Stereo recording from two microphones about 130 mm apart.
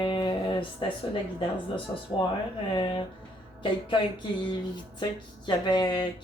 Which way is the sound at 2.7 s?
40° left (ahead or behind).